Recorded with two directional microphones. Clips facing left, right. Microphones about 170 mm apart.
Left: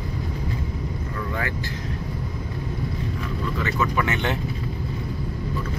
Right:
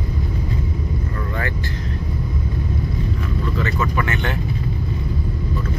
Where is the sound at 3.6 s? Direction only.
15° left (ahead or behind).